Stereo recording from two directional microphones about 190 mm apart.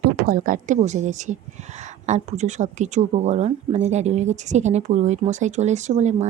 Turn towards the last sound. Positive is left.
turn(degrees=-35)  # may be behind; listen again after turning